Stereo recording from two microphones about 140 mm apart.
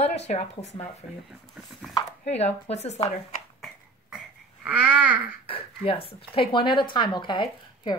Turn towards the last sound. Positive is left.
turn(degrees=35)  # may be behind; listen again after turning